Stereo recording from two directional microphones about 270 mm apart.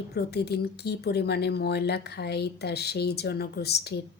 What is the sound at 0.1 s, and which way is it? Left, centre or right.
Speech, left.